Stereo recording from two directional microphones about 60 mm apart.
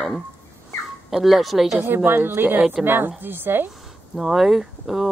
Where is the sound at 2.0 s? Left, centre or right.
Right.